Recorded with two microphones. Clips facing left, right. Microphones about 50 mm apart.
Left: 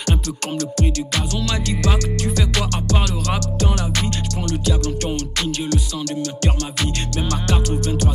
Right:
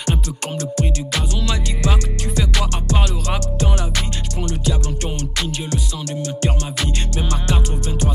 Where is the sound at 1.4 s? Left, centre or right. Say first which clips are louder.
Left 1 dB; right.